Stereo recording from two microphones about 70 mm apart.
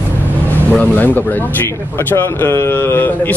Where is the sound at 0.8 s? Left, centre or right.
Left.